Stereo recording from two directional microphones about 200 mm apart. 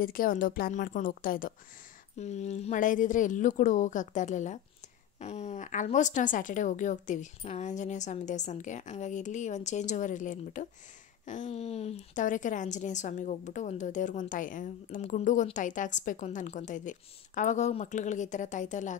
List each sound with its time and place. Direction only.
0.0 s a woman's voice: 45° left (ahead or behind)